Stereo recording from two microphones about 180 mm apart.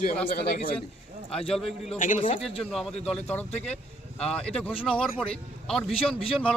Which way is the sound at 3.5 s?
35° left (ahead or behind).